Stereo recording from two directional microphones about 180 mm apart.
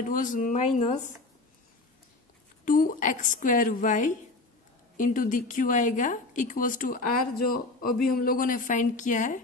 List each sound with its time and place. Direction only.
0.1 s a woman's voice: 45° left (ahead or behind)
2.6 s a woman's voice: 50° left (ahead or behind)